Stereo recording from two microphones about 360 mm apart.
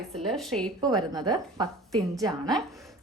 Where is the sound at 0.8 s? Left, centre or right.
Centre.